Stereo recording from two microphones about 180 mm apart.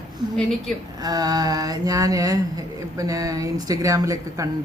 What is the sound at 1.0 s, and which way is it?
Speech, 20° right (ahead or behind).